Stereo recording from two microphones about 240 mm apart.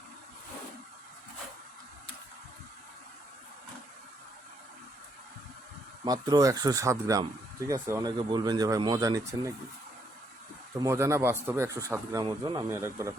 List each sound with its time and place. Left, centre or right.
6.1 s speech: centre
10.8 s speech: centre